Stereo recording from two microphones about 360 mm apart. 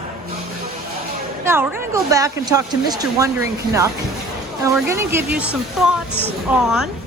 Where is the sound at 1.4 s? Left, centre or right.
Centre.